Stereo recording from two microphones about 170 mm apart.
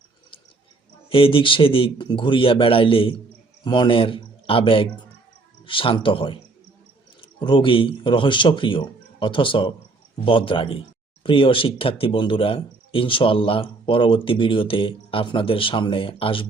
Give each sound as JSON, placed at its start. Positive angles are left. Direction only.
{"t": 1.1, "sound": "speech", "side_deg": 30}